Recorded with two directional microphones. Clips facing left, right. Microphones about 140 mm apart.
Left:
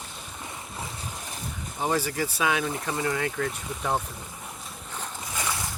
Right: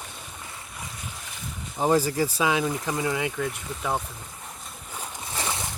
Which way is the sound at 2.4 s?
25° right (ahead or behind).